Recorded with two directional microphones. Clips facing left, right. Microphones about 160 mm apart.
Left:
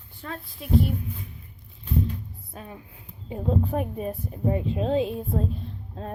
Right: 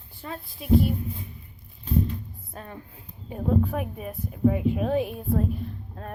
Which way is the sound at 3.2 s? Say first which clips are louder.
Right 1 dB; 25° left (ahead or behind).